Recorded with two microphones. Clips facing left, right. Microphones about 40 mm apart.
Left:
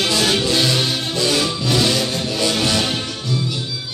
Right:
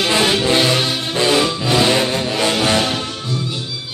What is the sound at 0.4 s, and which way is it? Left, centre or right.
Music, right.